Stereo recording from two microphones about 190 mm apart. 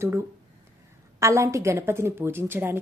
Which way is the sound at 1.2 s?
15° right (ahead or behind).